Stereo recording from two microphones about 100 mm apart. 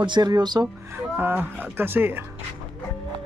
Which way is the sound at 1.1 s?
20° right (ahead or behind).